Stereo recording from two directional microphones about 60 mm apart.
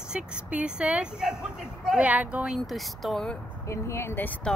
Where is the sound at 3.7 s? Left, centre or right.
Left.